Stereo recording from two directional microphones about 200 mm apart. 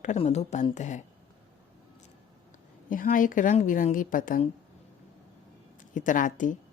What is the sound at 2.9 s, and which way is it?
A woman's voice, 40° left (ahead or behind).